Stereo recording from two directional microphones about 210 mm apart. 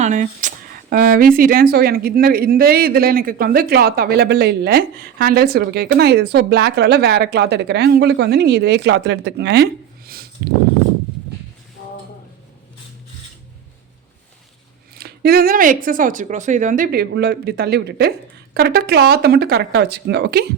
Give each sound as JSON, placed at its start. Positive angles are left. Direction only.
{"t": 0.0, "sound": "speech", "side_deg": -35}
{"t": 14.9, "sound": "speech", "side_deg": -50}